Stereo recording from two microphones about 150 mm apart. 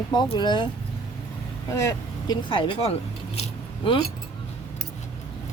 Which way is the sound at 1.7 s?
20° left (ahead or behind).